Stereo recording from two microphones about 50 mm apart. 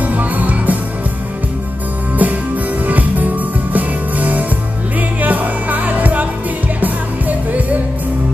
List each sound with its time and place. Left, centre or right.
0.0 s music: right
2.1 s music: right